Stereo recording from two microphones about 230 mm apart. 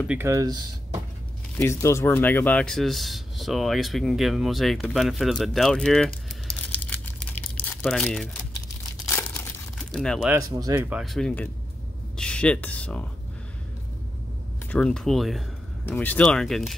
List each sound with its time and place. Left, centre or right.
0.1 s speech: centre
1.6 s speech: centre
6.7 s crumpling: centre
7.6 s speech: centre
9.0 s crumpling: centre
10.3 s speech: centre
11.0 s speech: centre
14.7 s speech: centre